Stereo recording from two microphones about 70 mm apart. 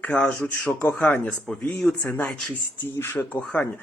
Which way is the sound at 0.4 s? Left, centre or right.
Left.